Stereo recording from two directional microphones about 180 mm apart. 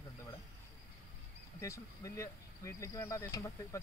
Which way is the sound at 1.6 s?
15° left (ahead or behind).